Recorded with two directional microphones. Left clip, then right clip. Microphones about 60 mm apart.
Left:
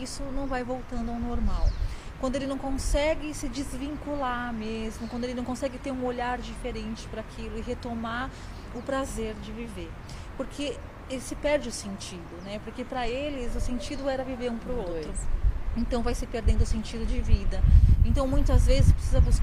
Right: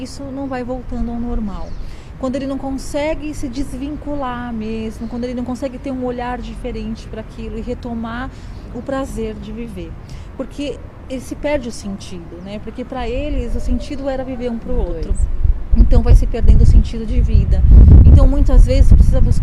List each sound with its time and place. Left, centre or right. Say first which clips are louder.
0.0 s speech: right 8 dB; right